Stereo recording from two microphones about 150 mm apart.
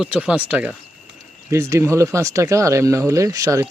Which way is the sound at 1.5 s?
20° right (ahead or behind).